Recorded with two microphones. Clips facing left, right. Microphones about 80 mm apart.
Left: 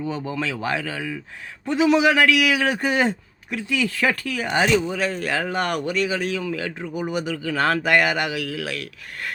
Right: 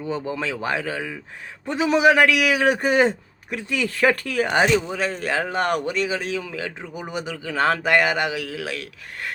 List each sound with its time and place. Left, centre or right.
0.1 s a man's voice: right
1.6 s a man's voice: right